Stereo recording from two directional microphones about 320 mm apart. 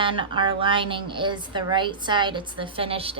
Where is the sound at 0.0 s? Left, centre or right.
Centre.